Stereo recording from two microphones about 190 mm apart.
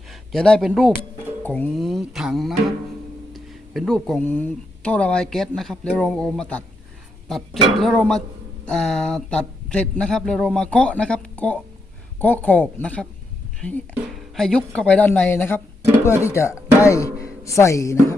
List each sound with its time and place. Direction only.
0.1 s speech: centre (ahead or behind)